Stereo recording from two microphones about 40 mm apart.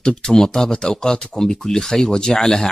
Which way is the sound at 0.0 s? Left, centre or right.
Centre.